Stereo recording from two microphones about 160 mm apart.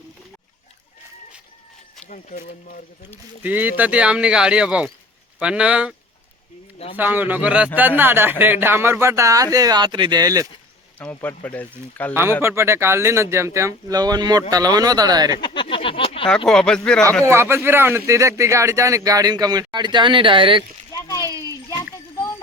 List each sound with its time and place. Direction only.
2.0 s speech: 55° left (ahead or behind)
3.4 s speech: 10° right (ahead or behind)
6.9 s speech: 10° right (ahead or behind)
11.0 s speech: 10° left (ahead or behind)
12.4 s speech: 15° right (ahead or behind)
15.4 s a sound: 30° left (ahead or behind)
16.5 s speech: 5° left (ahead or behind)
17.2 s speech: 15° right (ahead or behind); by 20.7 s 30° right (ahead or behind)
21.2 s a sound: 20° right (ahead or behind)